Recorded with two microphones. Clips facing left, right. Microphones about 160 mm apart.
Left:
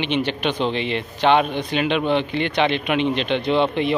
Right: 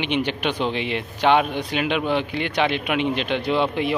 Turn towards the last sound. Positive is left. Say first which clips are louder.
# left 2 dB
turn(degrees=-5)  # may be behind; listen again after turning